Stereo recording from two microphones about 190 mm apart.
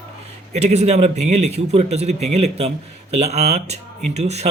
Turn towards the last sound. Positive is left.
turn(degrees=-35)  # may be behind; listen again after turning